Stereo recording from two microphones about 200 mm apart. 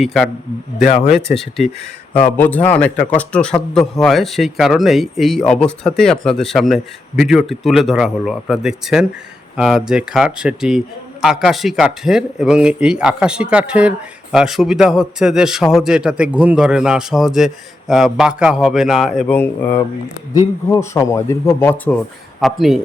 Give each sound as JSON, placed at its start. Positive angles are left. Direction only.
{"t": 0.0, "sound": "speech", "side_deg": 0}
{"t": 1.3, "sound": "speech", "side_deg": 0}
{"t": 22.4, "sound": "speech", "side_deg": 0}